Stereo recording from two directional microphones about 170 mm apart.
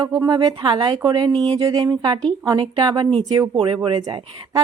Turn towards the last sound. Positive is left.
turn(degrees=-25)  # may be behind; listen again after turning